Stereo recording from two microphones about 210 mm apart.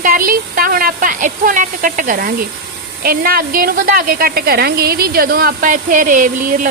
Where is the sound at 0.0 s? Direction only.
40° right (ahead or behind).